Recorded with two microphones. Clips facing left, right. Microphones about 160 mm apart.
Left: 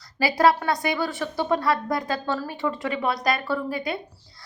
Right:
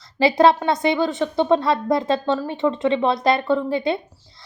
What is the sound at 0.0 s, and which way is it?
Speech, 25° right (ahead or behind).